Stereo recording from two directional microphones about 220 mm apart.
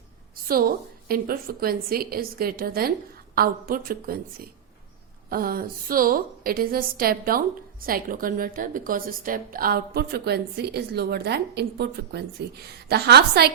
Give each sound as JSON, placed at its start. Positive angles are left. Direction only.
{"t": 0.4, "sound": "a woman's voice", "side_deg": -40}